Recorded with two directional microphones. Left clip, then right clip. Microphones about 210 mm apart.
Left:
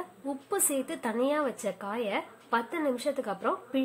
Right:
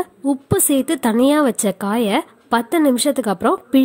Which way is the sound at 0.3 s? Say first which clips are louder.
Right 13 dB; 45° right (ahead or behind).